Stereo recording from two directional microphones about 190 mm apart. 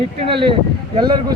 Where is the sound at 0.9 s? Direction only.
25° right (ahead or behind).